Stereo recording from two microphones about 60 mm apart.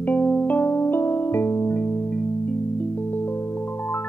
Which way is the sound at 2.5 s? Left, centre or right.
Left.